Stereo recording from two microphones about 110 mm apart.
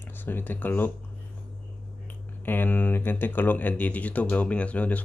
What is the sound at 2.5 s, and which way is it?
Speech, 15° left (ahead or behind).